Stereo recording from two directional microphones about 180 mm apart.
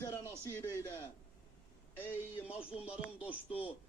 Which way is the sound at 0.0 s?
15° left (ahead or behind).